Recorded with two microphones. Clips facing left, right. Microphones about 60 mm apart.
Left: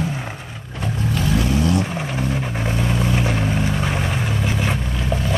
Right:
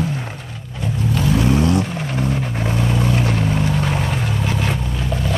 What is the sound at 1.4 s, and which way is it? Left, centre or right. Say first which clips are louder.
Vehicle: right 4 dB; right.